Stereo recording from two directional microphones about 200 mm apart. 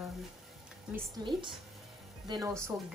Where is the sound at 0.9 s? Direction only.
20° right (ahead or behind).